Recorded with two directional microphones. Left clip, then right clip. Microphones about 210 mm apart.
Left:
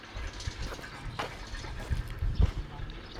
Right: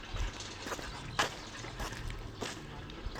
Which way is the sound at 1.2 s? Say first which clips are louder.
Right 4 dB; 15° right (ahead or behind).